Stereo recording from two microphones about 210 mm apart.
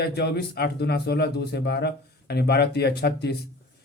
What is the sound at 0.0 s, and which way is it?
Speech, 50° left (ahead or behind).